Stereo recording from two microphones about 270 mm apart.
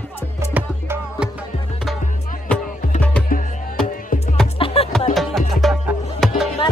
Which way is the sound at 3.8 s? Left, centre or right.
Left.